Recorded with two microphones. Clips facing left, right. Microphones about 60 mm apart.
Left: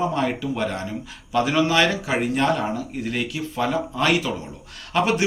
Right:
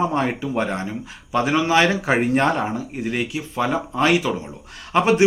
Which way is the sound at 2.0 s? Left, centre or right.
Right.